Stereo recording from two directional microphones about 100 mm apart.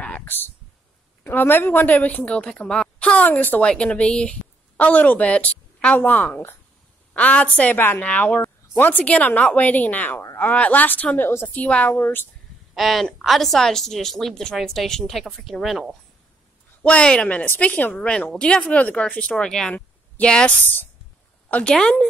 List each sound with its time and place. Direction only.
0.2 s a sound: 20° left (ahead or behind)
1.2 s a woman's voice: 20° left (ahead or behind)
12.7 s speech: centre (ahead or behind)
16.8 s a woman's voice: 10° left (ahead or behind)